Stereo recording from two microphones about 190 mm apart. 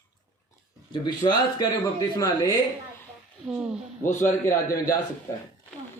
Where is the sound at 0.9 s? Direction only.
25° left (ahead or behind).